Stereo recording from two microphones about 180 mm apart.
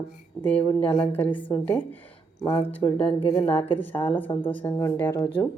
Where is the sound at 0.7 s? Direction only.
25° left (ahead or behind).